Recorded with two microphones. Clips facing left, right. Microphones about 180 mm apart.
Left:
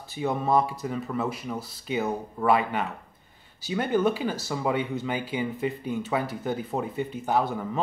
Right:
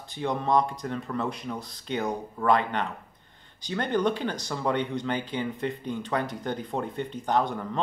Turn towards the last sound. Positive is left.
turn(degrees=5)  # may be behind; listen again after turning